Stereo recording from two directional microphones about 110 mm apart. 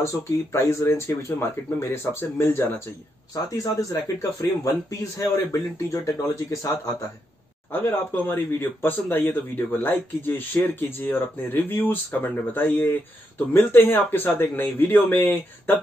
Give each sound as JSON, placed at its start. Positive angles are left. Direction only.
{"t": 0.0, "sound": "speech", "side_deg": 25}
{"t": 3.4, "sound": "a man's voice", "side_deg": 30}
{"t": 7.7, "sound": "speech", "side_deg": 20}